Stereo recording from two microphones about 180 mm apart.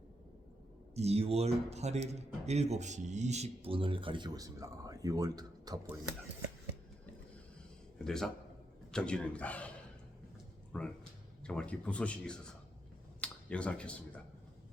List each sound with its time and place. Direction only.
0.9 s speech: 35° right (ahead or behind)
8.0 s a man's voice: 5° left (ahead or behind)
13.2 s a sound: 5° left (ahead or behind)